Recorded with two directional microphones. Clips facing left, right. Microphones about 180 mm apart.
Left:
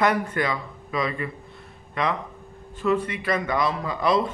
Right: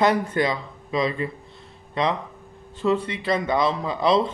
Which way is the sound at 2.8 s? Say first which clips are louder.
Right 1 dB; 25° right (ahead or behind).